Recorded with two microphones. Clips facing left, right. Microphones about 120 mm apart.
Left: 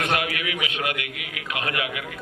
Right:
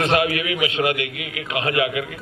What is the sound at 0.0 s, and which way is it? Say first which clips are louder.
A man's voice: right 6 dB; 30° right (ahead or behind).